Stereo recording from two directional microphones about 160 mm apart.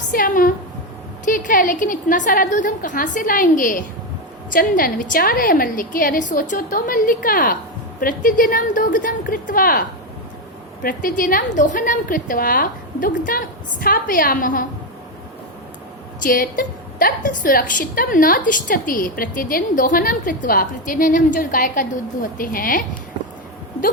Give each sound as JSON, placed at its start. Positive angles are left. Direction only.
{"t": 0.1, "sound": "a sound", "side_deg": 60}
{"t": 1.2, "sound": "a woman's voice", "side_deg": 55}
{"t": 10.8, "sound": "a woman's voice", "side_deg": 60}
{"t": 16.2, "sound": "a woman's voice", "side_deg": 60}